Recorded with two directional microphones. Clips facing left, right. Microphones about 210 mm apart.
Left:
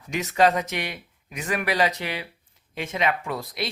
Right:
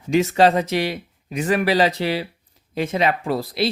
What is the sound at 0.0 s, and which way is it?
Speech, 30° right (ahead or behind).